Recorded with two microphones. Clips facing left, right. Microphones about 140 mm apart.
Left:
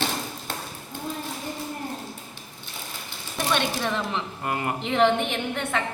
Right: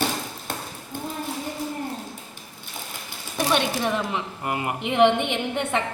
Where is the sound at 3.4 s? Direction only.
15° right (ahead or behind).